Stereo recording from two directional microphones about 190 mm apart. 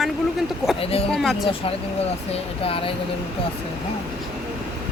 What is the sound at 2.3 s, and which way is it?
Speech, 30° left (ahead or behind).